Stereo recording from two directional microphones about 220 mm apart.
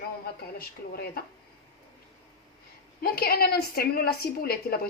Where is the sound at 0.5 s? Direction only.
45° left (ahead or behind).